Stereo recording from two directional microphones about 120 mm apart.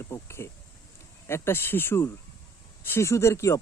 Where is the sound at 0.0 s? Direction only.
20° left (ahead or behind).